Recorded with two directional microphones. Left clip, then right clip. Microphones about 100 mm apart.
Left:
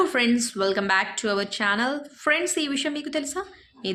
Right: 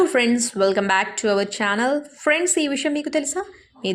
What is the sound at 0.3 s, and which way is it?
A woman's voice, 35° right (ahead or behind).